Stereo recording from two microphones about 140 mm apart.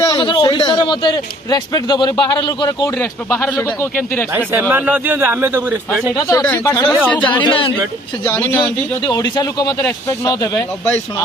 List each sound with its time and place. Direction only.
0.0 s a man's voice: 30° left (ahead or behind)
2.9 s speech: 15° left (ahead or behind)
4.3 s speech: 15° right (ahead or behind)
6.1 s speech: 25° left (ahead or behind)
6.4 s speech: 15° left (ahead or behind)
7.4 s a man's voice: 40° left (ahead or behind)
9.0 s speech: 30° left (ahead or behind)